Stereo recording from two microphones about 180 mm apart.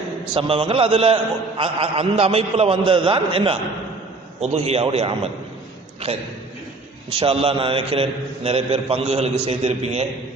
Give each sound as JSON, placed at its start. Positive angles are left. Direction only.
{"t": 0.3, "sound": "a man's voice", "side_deg": -30}
{"t": 7.2, "sound": "a man's voice", "side_deg": -30}